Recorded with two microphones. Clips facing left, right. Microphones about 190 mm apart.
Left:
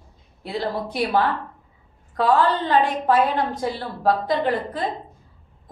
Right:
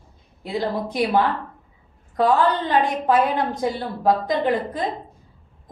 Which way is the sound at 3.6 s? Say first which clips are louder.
Right 3 dB; 15° right (ahead or behind).